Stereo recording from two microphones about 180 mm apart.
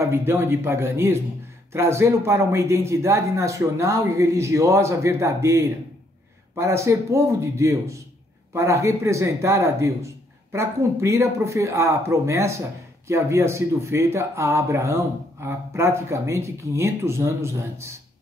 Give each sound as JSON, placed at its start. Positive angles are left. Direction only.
{"t": 0.0, "sound": "speech", "side_deg": -15}